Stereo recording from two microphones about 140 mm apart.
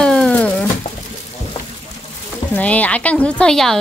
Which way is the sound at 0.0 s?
5° left (ahead or behind).